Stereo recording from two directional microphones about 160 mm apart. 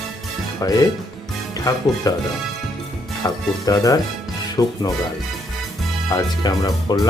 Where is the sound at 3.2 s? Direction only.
25° left (ahead or behind).